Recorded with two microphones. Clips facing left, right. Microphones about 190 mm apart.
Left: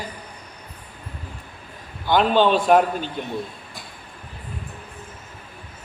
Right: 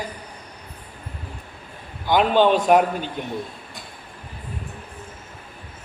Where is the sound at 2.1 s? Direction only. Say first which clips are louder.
Even; 15° right (ahead or behind).